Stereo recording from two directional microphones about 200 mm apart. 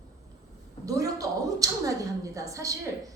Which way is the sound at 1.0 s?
15° right (ahead or behind).